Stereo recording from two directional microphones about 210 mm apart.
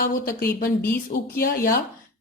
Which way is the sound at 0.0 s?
45° left (ahead or behind).